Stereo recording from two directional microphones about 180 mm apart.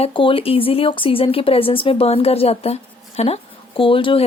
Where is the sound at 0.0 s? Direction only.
30° left (ahead or behind).